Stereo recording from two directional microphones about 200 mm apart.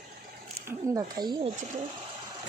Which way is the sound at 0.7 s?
20° right (ahead or behind).